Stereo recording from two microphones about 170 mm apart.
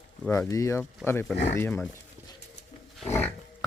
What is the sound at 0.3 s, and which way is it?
Speech, 15° left (ahead or behind).